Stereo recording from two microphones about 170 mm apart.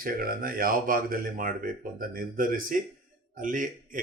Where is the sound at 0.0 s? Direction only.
55° right (ahead or behind).